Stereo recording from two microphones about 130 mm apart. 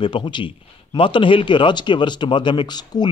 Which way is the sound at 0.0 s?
40° left (ahead or behind).